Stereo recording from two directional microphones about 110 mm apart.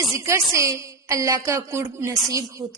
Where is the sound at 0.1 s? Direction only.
25° right (ahead or behind).